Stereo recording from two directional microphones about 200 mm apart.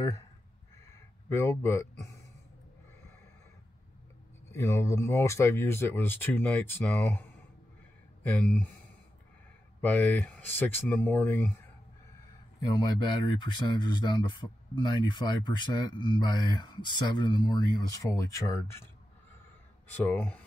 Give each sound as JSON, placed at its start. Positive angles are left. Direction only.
{"t": 1.3, "sound": "speech", "side_deg": 15}
{"t": 4.5, "sound": "speech", "side_deg": 10}
{"t": 9.8, "sound": "speech", "side_deg": 10}
{"t": 12.6, "sound": "speech", "side_deg": 20}
{"t": 19.9, "sound": "speech", "side_deg": 10}